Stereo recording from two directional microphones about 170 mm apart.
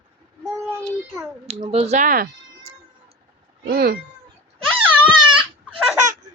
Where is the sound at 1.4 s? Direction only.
35° right (ahead or behind); by 4.0 s 65° right (ahead or behind).